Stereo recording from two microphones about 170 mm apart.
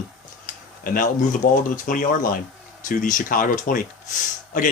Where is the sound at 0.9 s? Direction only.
50° left (ahead or behind).